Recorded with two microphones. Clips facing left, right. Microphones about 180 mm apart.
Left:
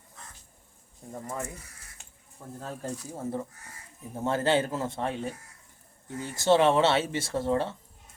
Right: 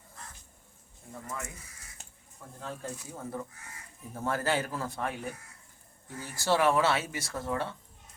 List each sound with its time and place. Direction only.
1.1 s speech: 30° left (ahead or behind)
2.0 s a sound: 40° right (ahead or behind)
2.6 s speech: 35° left (ahead or behind)